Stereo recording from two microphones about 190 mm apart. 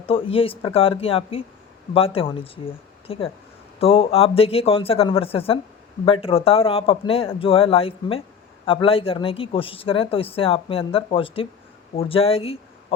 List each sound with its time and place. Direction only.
0.1 s a man's voice: 30° left (ahead or behind)